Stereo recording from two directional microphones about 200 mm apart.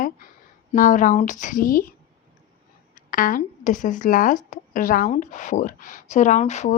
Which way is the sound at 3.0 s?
45° left (ahead or behind).